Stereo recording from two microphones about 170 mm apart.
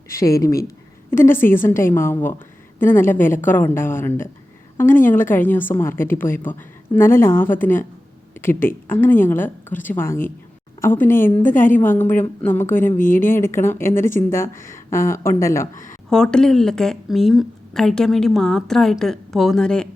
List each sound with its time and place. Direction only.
0.1 s a woman's voice: 15° left (ahead or behind)
15.7 s speech: 50° left (ahead or behind)
16.0 s a woman's voice: 5° left (ahead or behind)